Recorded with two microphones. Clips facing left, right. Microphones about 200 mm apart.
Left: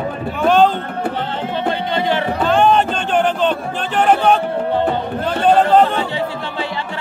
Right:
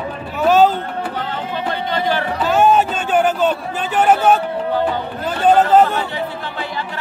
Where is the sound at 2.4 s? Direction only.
5° right (ahead or behind).